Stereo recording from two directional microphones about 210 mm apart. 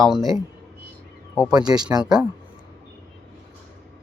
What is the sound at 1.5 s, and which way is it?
Speech, 20° right (ahead or behind).